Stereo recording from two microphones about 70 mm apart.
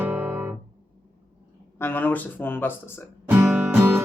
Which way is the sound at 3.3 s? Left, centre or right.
Right.